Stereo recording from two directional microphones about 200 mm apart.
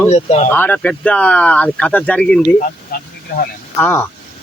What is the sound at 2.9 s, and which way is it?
Speech, 50° left (ahead or behind).